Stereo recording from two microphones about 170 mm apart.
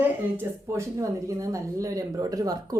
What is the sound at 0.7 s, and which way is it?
Speech, 15° right (ahead or behind).